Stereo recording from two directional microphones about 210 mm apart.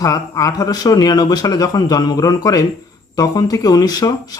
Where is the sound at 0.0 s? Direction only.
15° left (ahead or behind).